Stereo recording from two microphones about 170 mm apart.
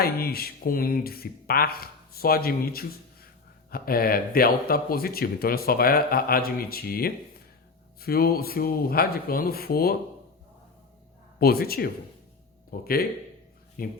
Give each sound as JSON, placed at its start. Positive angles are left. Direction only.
{"t": 0.0, "sound": "speech", "side_deg": 65}
{"t": 11.3, "sound": "speech", "side_deg": 65}